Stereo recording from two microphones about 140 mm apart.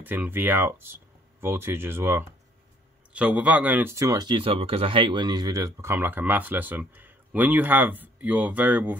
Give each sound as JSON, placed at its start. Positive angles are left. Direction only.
{"t": 0.0, "sound": "speech", "side_deg": -15}